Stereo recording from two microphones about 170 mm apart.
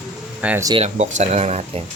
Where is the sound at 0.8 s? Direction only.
40° right (ahead or behind).